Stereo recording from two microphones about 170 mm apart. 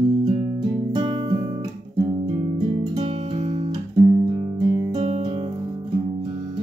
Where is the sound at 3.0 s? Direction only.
40° right (ahead or behind).